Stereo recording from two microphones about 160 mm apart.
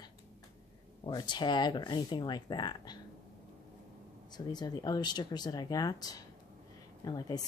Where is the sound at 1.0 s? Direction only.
25° left (ahead or behind).